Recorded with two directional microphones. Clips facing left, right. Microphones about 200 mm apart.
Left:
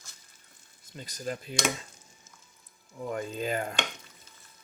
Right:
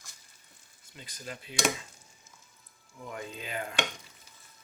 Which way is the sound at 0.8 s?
40° left (ahead or behind).